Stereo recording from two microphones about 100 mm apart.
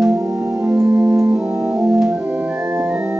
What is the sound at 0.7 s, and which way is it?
Organ, 30° right (ahead or behind).